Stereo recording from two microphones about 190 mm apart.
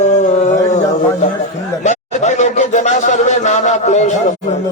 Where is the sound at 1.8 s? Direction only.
40° left (ahead or behind).